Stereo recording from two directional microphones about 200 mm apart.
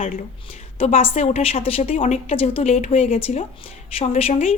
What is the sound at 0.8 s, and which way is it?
Speech, 30° left (ahead or behind).